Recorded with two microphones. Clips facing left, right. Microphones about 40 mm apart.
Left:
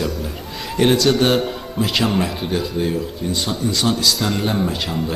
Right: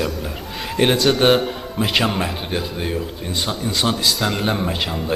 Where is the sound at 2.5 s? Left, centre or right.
Right.